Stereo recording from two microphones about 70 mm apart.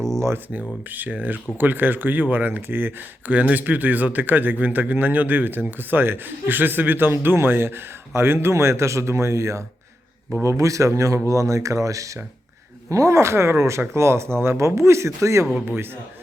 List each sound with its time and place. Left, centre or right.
0.9 s a man's voice: right